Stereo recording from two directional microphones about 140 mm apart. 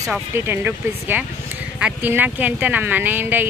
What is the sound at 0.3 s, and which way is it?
Speech, 15° right (ahead or behind).